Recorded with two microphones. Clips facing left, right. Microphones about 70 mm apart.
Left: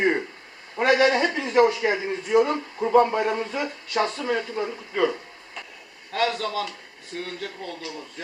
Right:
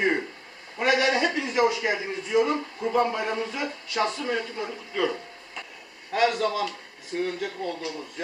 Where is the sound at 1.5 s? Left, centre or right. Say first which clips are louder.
Left 7 dB; left.